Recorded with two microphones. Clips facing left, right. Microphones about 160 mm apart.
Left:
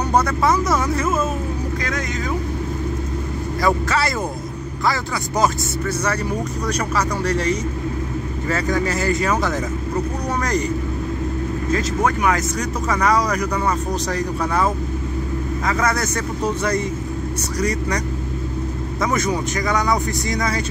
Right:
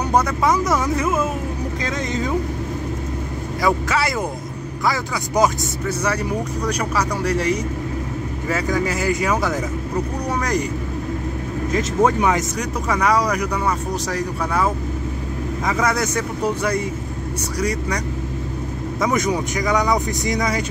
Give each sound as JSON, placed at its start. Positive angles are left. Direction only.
{"t": 0.1, "sound": "speech", "side_deg": -15}
{"t": 1.9, "sound": "speech", "side_deg": -25}
{"t": 3.6, "sound": "speech", "side_deg": -10}
{"t": 11.7, "sound": "speech", "side_deg": -20}